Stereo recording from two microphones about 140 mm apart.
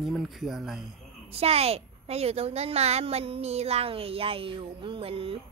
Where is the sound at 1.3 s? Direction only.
45° right (ahead or behind).